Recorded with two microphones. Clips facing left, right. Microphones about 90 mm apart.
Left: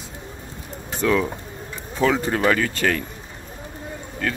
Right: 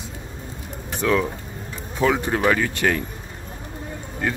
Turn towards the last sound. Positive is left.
turn(degrees=-15)  # may be behind; listen again after turning